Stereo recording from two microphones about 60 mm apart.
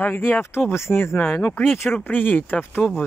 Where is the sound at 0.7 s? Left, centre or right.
Left.